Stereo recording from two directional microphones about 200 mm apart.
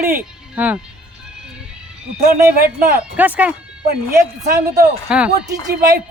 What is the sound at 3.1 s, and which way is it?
Speech, 10° right (ahead or behind).